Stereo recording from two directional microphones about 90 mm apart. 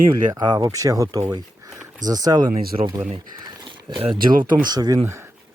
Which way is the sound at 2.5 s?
90° right.